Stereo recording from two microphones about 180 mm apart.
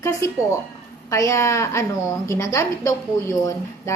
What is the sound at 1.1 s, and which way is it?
A woman's voice, 15° left (ahead or behind).